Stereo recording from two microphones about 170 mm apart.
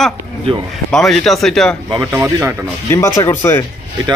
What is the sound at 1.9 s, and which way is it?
Speech, 15° right (ahead or behind).